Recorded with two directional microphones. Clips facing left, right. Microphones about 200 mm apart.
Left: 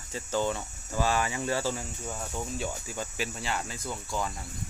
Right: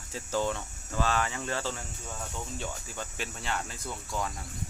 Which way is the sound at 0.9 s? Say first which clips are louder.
Left 2 dB; 10° left (ahead or behind).